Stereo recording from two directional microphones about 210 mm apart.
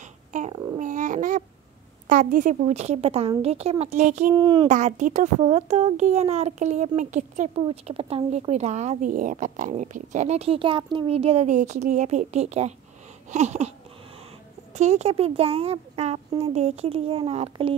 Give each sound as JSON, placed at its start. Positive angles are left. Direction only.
{"t": 0.3, "sound": "babbling", "side_deg": -35}
{"t": 2.0, "sound": "a child's voice", "side_deg": -35}
{"t": 4.4, "sound": "speech", "side_deg": -25}
{"t": 4.6, "sound": "a child's voice", "side_deg": -35}